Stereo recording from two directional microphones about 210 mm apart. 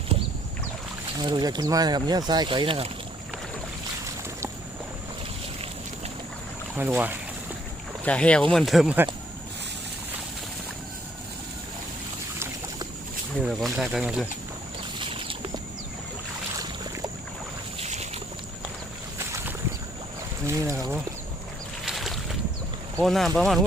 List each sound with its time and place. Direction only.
1.2 s speech: 20° right (ahead or behind)
6.7 s speech: 10° right (ahead or behind)
8.0 s speech: 5° left (ahead or behind)
13.5 s speech: centre (ahead or behind)
14.9 s a sound: 25° right (ahead or behind)
17.7 s boat: 30° right (ahead or behind)
19.2 s boat: 10° right (ahead or behind)
20.5 s speech: 15° right (ahead or behind)
21.8 s boat: centre (ahead or behind)
23.0 s speech: centre (ahead or behind)